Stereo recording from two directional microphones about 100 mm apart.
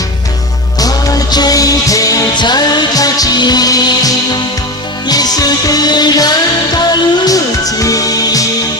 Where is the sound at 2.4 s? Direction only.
45° left (ahead or behind).